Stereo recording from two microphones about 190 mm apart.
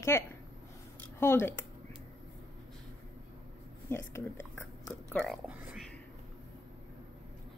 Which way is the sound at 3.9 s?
15° left (ahead or behind).